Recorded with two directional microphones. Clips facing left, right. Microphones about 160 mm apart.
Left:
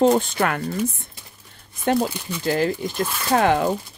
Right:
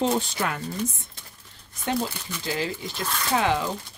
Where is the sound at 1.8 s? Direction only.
55° left (ahead or behind).